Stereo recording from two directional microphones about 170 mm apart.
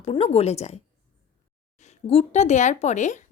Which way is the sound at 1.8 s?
40° left (ahead or behind).